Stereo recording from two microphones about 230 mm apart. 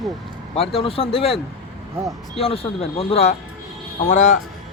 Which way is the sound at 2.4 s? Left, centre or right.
Left.